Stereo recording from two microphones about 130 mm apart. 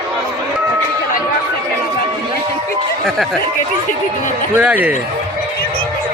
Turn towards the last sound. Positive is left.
turn(degrees=-10)  # may be behind; listen again after turning